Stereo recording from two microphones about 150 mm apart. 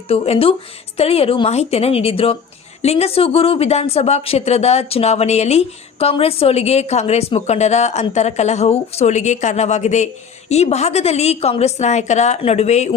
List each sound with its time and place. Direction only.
0.1 s a woman's voice: 40° left (ahead or behind)